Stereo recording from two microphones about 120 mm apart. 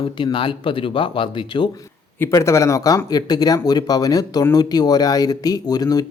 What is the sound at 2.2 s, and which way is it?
Speech, 25° left (ahead or behind).